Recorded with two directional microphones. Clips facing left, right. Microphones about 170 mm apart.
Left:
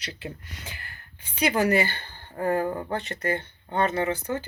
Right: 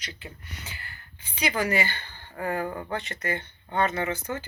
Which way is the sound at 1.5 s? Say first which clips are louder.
Left 4 dB; 40° left (ahead or behind).